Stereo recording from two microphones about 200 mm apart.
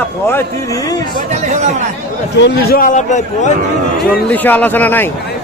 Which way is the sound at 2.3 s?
55° left (ahead or behind).